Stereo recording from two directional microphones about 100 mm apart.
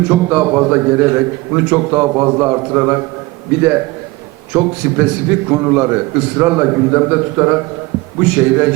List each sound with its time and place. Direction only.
0.1 s a man's voice: 20° right (ahead or behind)